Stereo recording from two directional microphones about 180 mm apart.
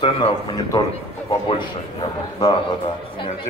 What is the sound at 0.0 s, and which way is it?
A man's voice, 25° left (ahead or behind).